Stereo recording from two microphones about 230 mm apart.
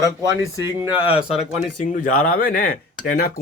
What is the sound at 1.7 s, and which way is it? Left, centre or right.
Speech, left.